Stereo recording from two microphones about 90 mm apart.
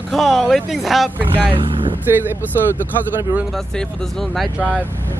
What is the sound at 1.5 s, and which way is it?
Vehicle, 75° right (ahead or behind).